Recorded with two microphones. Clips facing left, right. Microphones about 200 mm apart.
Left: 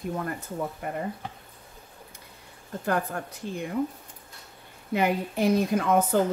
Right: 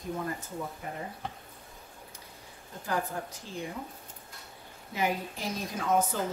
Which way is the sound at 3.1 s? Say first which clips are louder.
Left 3 dB; 65° left (ahead or behind).